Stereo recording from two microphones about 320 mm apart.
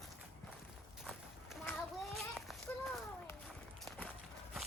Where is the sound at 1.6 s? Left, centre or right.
Centre.